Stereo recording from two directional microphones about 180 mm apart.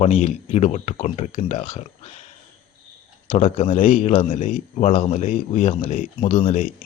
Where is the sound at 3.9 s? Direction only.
45° left (ahead or behind).